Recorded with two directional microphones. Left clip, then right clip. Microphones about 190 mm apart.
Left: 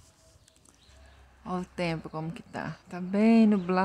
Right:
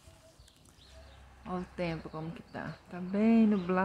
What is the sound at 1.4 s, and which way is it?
Speech, 45° left (ahead or behind).